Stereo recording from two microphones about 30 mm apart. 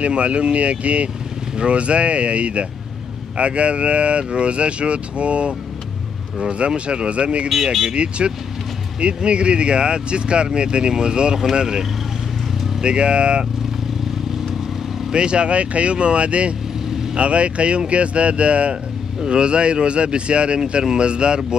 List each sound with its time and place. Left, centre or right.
0.0 s speech: right
6.6 s speech: right
7.4 s speech: centre
7.9 s speech: right
12.8 s speech: right
15.1 s speech: right
19.2 s speech: right